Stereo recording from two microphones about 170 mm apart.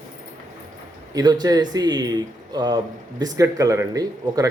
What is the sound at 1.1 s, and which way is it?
Speech, 25° right (ahead or behind).